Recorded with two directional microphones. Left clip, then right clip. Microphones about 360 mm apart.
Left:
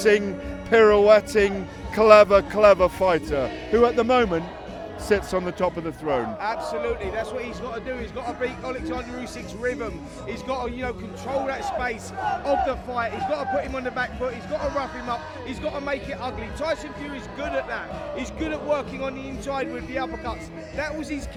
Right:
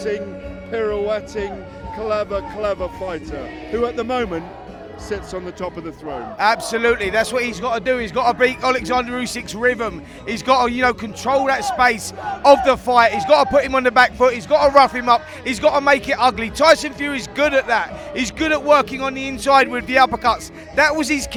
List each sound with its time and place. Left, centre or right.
0.7 s speech: left
3.8 s speech: centre
6.4 s a man's voice: right